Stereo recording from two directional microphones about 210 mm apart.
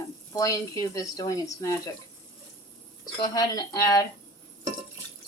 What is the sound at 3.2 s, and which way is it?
Speech, 15° left (ahead or behind).